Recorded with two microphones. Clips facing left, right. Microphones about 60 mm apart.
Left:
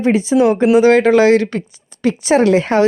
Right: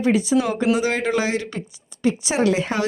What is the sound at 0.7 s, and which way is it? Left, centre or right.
A woman's voice, left.